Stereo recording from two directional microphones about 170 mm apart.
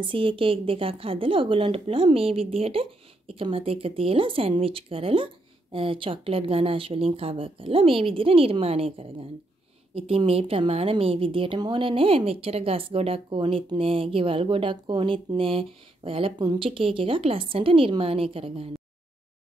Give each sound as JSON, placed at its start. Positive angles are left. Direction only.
{"t": 0.0, "sound": "a woman's voice", "side_deg": -30}